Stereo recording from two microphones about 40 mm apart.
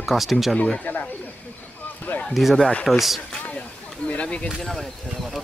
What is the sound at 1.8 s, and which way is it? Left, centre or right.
Basketball bounce, left.